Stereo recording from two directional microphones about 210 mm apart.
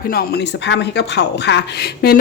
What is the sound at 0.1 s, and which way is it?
Speech, 50° left (ahead or behind).